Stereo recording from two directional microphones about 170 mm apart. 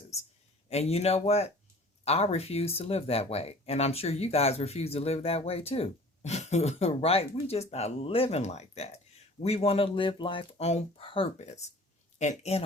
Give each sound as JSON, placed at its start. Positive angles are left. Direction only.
{"t": 0.7, "sound": "speech", "side_deg": 35}